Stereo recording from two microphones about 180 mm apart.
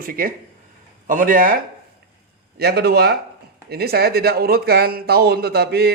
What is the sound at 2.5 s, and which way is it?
A man's voice, 65° right (ahead or behind).